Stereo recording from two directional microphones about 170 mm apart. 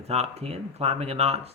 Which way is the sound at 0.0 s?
40° right (ahead or behind).